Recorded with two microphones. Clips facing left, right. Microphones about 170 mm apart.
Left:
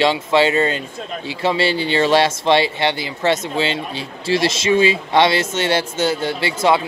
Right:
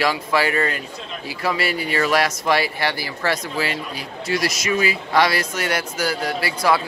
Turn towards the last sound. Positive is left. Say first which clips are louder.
# left 3 dB
turn(degrees=25)  # may be behind; listen again after turning